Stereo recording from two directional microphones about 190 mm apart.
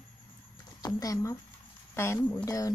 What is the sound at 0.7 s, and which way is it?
Speech, 20° left (ahead or behind).